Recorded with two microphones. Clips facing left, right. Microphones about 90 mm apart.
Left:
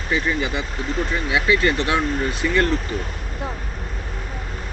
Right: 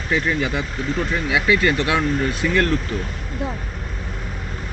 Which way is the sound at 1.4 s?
25° left (ahead or behind).